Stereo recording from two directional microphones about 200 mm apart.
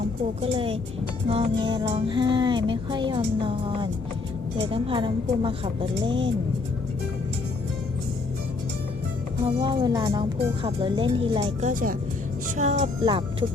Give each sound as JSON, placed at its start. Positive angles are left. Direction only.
{"t": 0.4, "sound": "music", "side_deg": -30}
{"t": 9.4, "sound": "music", "side_deg": -20}
{"t": 11.7, "sound": "speech", "side_deg": -45}